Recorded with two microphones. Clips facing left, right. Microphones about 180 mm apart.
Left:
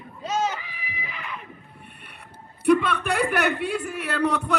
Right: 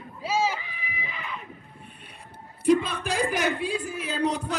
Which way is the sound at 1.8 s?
65° left (ahead or behind).